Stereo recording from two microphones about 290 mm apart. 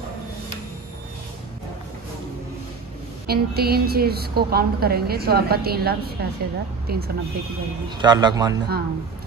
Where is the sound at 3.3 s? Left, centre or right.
Right.